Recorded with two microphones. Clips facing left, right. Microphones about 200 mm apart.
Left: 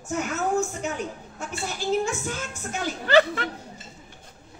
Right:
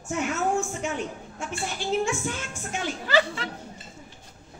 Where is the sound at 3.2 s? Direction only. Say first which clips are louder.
Left 5 dB; 55° left (ahead or behind).